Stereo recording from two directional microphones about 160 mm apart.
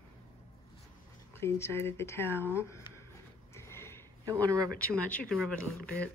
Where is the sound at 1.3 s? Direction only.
15° left (ahead or behind).